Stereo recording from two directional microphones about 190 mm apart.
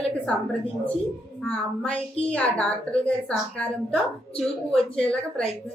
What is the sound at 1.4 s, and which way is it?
Child singing, 5° left (ahead or behind).